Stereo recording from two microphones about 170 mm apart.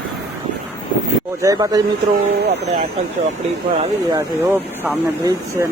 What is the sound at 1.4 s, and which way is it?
Speech, 20° right (ahead or behind).